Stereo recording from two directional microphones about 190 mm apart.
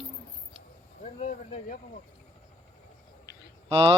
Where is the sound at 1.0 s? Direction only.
40° left (ahead or behind).